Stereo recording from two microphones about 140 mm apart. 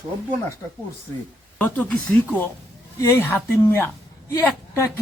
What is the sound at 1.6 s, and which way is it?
Speech, 10° left (ahead or behind).